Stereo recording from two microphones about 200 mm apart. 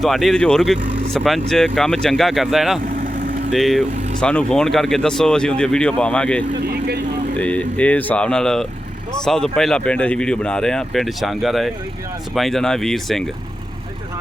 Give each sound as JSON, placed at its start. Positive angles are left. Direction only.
{"t": 0.0, "sound": "speech", "side_deg": 0}
{"t": 2.8, "sound": "vehicle", "side_deg": -45}
{"t": 3.5, "sound": "speech", "side_deg": 0}
{"t": 6.7, "sound": "vehicle", "side_deg": -55}
{"t": 7.3, "sound": "speech", "side_deg": 5}